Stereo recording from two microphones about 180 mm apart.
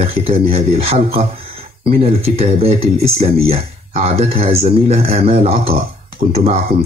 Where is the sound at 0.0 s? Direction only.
35° right (ahead or behind).